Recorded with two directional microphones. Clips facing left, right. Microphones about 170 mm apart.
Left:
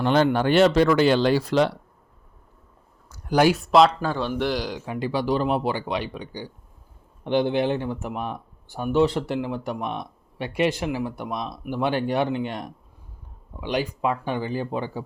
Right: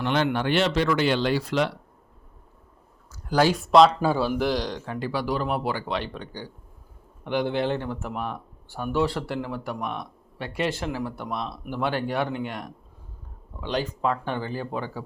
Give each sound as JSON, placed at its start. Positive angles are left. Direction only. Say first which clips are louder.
{"t": 0.0, "sound": "speech", "louder": "left 4 dB", "side_deg": 35}
{"t": 3.1, "sound": "a sound", "louder": "left 2 dB", "side_deg": 15}
{"t": 3.5, "sound": "speech", "louder": "right 1 dB", "side_deg": 0}
{"t": 4.9, "sound": "speech", "louder": "left 4 dB", "side_deg": 20}
{"t": 7.3, "sound": "speech", "louder": "left 3 dB", "side_deg": 25}